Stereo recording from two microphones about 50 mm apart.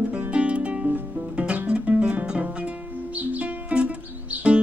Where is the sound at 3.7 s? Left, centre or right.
Right.